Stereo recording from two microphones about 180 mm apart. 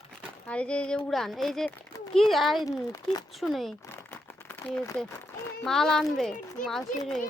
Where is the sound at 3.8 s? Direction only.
10° left (ahead or behind).